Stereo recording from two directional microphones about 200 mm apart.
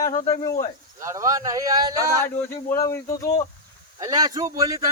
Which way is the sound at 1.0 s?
15° right (ahead or behind).